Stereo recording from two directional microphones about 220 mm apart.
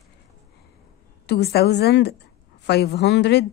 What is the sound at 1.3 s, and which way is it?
A woman's voice, 45° left (ahead or behind).